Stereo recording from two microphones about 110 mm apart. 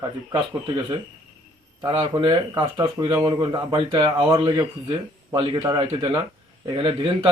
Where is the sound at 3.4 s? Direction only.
45° right (ahead or behind).